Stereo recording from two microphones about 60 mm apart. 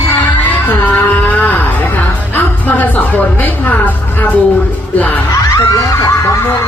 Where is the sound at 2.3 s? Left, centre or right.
Left.